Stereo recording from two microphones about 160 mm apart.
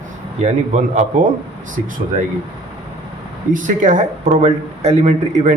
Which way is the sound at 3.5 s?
55° right (ahead or behind).